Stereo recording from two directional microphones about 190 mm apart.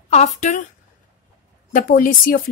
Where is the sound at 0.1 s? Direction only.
40° left (ahead or behind).